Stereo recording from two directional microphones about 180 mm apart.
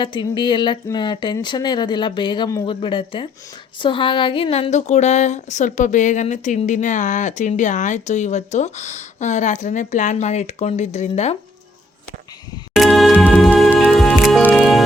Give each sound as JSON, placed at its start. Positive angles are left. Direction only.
{"t": 0.0, "sound": "speech", "side_deg": 25}
{"t": 12.7, "sound": "music", "side_deg": 0}